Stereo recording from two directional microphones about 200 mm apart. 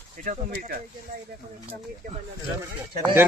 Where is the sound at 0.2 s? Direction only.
40° right (ahead or behind).